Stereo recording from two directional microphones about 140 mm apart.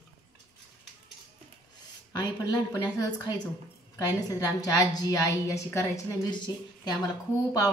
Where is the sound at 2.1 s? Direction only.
30° left (ahead or behind).